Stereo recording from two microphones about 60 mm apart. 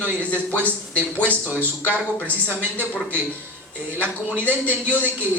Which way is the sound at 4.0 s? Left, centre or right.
Right.